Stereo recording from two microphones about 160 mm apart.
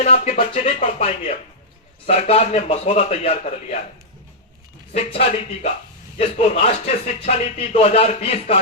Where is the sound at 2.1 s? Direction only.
40° left (ahead or behind).